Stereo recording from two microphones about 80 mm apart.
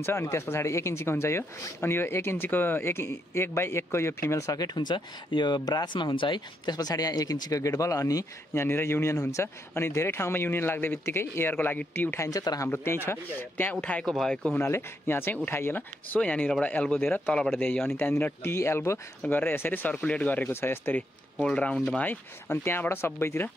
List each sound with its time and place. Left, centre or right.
0.0 s speech: left
4.6 s speech: left
8.5 s speech: left
11.5 s speech: left
12.3 s speech: left
12.6 s speech: left
14.0 s speech: centre
14.6 s speech: left
16.2 s speech: centre; by 18.9 s left
19.2 s speech: left
21.4 s speech: centre; by 23.5 s left